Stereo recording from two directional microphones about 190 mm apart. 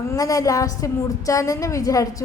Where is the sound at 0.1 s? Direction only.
20° left (ahead or behind).